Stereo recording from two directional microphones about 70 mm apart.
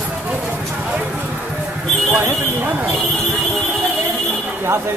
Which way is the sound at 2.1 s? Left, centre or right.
Right.